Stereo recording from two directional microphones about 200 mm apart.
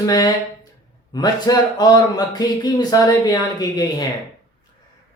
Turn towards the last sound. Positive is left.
turn(degrees=20)  # may be behind; listen again after turning